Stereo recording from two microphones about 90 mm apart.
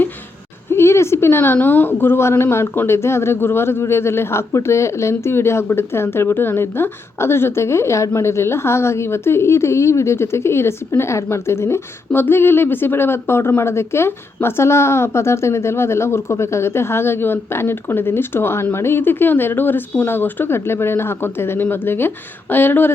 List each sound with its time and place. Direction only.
0.7 s a woman's voice: 30° left (ahead or behind)